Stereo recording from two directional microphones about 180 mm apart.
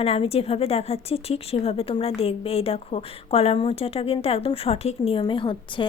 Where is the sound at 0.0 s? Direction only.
35° left (ahead or behind).